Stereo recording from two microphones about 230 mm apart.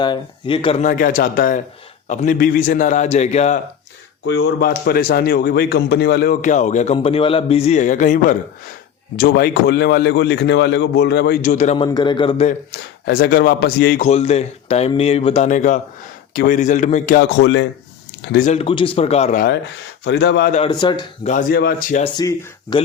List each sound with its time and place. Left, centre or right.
0.0 s a man's voice: left
4.3 s a man's voice: left
4.7 s a man's voice: left
11.9 s speech: centre
13.1 s a man's voice: left
17.4 s a man's voice: left
18.3 s speech: left
20.1 s a man's voice: left
20.5 s speech: left
21.2 s a man's voice: left
22.0 s speech: centre